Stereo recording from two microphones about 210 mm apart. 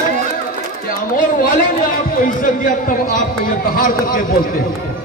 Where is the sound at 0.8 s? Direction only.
40° left (ahead or behind).